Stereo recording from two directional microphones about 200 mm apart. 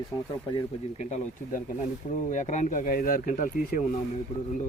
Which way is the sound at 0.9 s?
35° left (ahead or behind).